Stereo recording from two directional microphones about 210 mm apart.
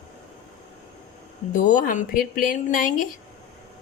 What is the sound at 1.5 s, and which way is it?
Speech, 40° left (ahead or behind).